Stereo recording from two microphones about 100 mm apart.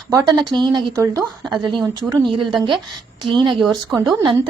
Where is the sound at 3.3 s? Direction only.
55° right (ahead or behind).